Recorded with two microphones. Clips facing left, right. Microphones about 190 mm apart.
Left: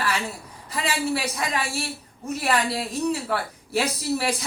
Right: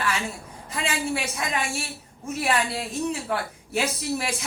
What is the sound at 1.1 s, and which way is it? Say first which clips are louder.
A woman's voice: left 1 dB; 35° left (ahead or behind).